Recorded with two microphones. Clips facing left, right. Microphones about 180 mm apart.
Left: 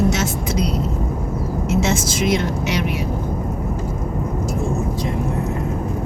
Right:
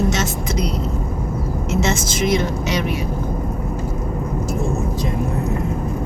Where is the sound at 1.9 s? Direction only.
10° left (ahead or behind).